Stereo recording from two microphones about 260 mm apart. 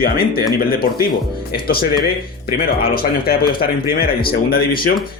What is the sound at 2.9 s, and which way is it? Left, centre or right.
Speech, left.